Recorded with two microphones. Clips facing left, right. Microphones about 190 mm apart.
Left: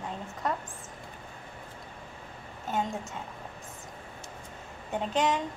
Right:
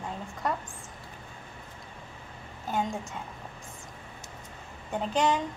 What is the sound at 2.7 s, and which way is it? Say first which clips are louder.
Speech: right 1 dB; centre (ahead or behind).